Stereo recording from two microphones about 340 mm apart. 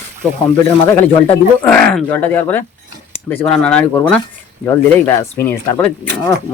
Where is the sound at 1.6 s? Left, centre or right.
Centre.